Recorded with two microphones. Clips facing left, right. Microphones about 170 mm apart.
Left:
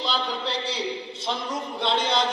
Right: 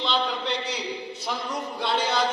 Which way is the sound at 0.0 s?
35° left (ahead or behind).